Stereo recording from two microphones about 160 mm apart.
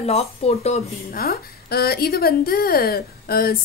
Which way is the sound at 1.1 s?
70° left (ahead or behind).